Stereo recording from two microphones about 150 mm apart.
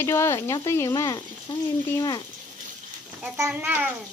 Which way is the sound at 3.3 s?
15° right (ahead or behind).